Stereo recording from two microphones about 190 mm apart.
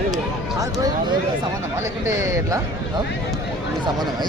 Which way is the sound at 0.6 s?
20° right (ahead or behind).